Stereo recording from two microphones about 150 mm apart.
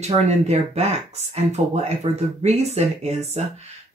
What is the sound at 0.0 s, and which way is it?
Speech, 45° right (ahead or behind).